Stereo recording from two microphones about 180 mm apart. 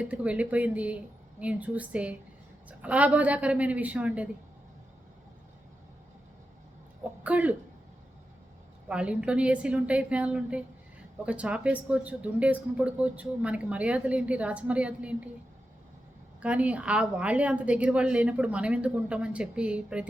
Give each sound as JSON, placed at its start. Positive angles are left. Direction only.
{"t": 0.0, "sound": "speech", "side_deg": -5}
{"t": 7.0, "sound": "speech", "side_deg": -10}
{"t": 8.9, "sound": "speech", "side_deg": -5}
{"t": 16.4, "sound": "speech", "side_deg": -5}